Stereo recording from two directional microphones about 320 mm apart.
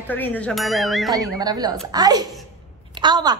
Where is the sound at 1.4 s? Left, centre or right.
Centre.